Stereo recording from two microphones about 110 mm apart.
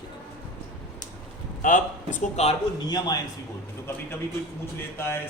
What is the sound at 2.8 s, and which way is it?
Speech, 40° left (ahead or behind).